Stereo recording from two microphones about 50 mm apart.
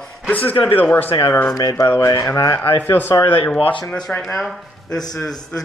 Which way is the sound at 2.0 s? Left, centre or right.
Left.